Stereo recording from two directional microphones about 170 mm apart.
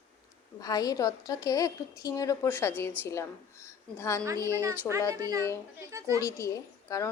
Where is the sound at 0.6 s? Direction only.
20° left (ahead or behind).